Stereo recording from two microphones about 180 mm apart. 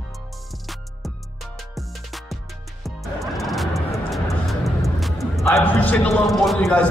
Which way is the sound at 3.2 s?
Centre (ahead or behind).